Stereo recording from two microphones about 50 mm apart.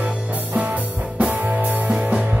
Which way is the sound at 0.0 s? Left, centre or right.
Right.